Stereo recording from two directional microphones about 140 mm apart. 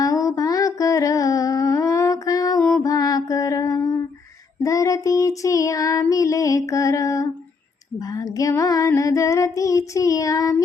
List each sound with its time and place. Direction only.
0.0 s a sound: 25° left (ahead or behind)
4.6 s child singing: 25° left (ahead or behind)
7.9 s female singing: 25° left (ahead or behind)
8.9 s child singing: 25° left (ahead or behind)